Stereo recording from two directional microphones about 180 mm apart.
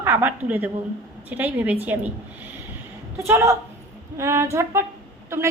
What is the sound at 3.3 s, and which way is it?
A woman's voice, 15° right (ahead or behind).